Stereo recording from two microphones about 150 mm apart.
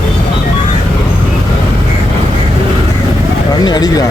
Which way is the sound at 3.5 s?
25° left (ahead or behind).